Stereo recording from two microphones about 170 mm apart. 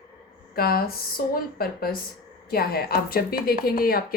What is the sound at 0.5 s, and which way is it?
A woman's voice, 65° left (ahead or behind).